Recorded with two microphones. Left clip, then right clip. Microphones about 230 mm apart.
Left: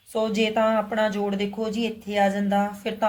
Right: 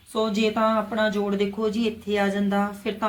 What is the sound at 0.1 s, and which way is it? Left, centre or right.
Speech, left.